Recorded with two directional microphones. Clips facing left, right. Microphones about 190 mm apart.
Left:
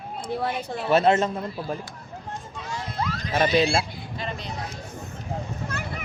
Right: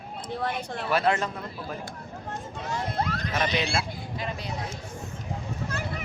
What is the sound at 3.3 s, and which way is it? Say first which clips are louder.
Speech: left 7 dB; 30° left (ahead or behind).